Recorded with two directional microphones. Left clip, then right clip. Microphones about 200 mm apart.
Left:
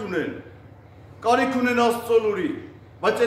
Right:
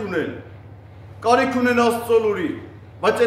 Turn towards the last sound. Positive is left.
turn(degrees=-10)  # may be behind; listen again after turning